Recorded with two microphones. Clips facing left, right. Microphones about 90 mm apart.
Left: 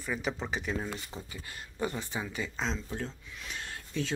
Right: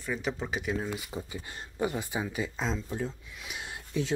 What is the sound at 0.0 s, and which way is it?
Speech, centre (ahead or behind).